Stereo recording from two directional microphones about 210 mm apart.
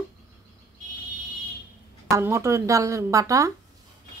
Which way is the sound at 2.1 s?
15° right (ahead or behind).